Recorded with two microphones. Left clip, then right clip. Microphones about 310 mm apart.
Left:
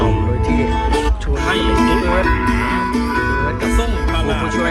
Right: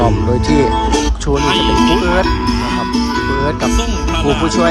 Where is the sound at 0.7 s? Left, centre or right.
Right.